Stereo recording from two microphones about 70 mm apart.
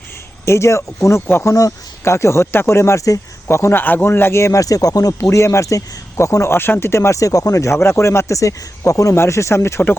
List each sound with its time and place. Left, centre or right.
0.4 s speech: left
3.5 s speech: left
5.3 s speech: left
7.8 s speech: left